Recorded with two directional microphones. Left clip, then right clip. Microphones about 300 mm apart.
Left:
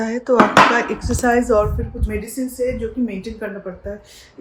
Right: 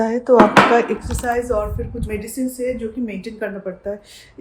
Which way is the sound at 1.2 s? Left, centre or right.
Left.